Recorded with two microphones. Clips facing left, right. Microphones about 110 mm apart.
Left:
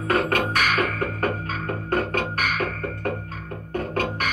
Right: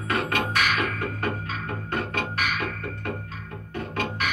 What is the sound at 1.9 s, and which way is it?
Music, 45° left (ahead or behind).